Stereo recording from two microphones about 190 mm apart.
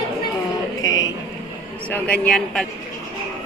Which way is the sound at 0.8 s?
20° left (ahead or behind).